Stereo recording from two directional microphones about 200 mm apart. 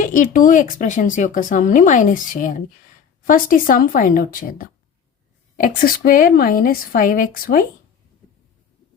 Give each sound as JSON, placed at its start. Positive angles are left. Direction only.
{"t": 0.0, "sound": "a woman's voice", "side_deg": 40}